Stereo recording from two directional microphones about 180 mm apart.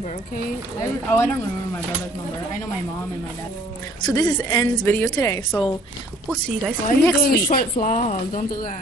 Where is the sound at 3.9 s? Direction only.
20° left (ahead or behind).